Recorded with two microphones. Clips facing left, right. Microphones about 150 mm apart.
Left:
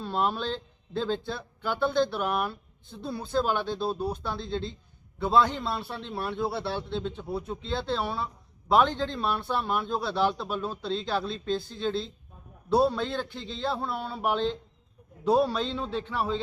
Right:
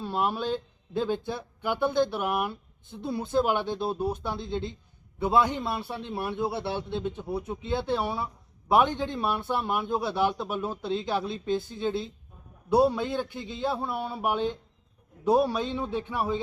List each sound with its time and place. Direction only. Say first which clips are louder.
0.0 s speech: even; 10° right (ahead or behind)